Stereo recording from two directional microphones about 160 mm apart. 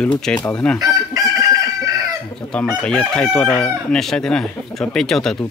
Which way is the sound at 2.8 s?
5° left (ahead or behind).